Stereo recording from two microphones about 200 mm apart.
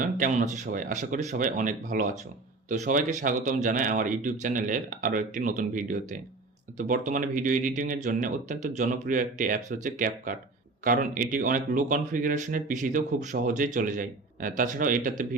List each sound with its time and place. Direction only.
0.0 s speech: 40° right (ahead or behind)